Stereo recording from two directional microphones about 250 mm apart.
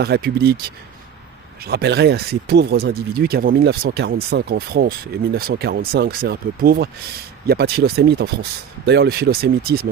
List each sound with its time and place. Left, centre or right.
0.0 s speech: right
1.6 s speech: right